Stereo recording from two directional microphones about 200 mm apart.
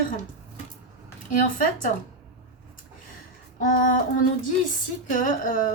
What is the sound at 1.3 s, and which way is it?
Speech, 40° left (ahead or behind).